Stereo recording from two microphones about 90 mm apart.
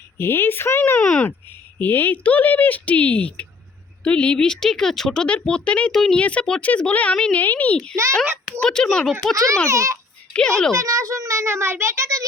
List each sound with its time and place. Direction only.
0.2 s speech: 25° left (ahead or behind); by 9.1 s 10° left (ahead or behind)
9.3 s a child's voice: 40° right (ahead or behind)
10.3 s speech: 10° left (ahead or behind)
10.8 s a child's voice: 35° right (ahead or behind)